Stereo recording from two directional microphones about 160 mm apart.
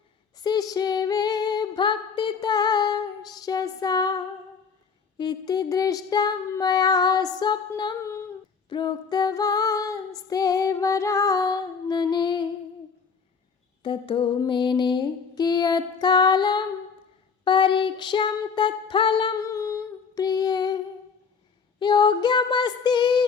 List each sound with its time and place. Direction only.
0.3 s female singing: 25° left (ahead or behind)
13.8 s female singing: 30° left (ahead or behind)
17.4 s a sound: 30° left (ahead or behind)
21.8 s female singing: 30° left (ahead or behind)